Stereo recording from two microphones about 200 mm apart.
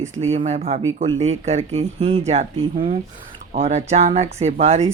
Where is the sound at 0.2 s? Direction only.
30° right (ahead or behind).